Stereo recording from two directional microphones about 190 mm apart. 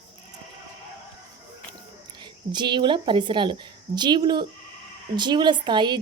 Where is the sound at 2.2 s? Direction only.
25° right (ahead or behind).